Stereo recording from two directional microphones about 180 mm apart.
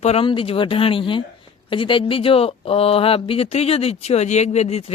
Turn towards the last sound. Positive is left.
turn(degrees=35)  # may be behind; listen again after turning